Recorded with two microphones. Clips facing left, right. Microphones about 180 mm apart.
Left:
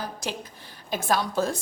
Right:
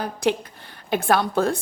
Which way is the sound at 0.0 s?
60° right (ahead or behind).